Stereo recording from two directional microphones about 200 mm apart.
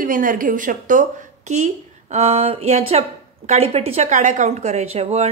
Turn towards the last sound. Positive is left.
turn(degrees=-30)  # may be behind; listen again after turning